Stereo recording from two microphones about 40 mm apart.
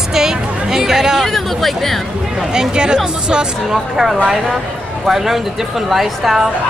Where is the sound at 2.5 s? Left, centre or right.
Right.